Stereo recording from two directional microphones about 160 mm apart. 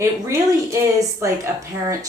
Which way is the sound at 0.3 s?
20° right (ahead or behind).